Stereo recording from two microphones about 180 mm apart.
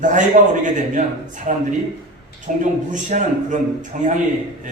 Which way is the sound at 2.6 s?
45° right (ahead or behind).